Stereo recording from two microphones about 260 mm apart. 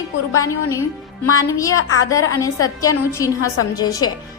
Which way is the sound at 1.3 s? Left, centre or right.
Centre.